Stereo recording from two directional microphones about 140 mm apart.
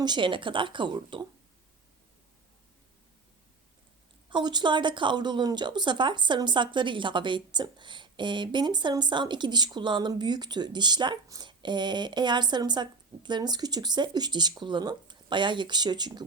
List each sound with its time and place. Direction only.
0.0 s speech: 35° right (ahead or behind)
4.3 s speech: 35° right (ahead or behind)